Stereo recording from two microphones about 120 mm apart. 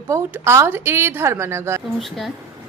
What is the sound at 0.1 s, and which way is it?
Speech, 20° right (ahead or behind).